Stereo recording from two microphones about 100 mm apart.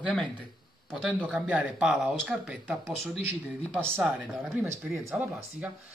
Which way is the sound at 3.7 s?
25° right (ahead or behind).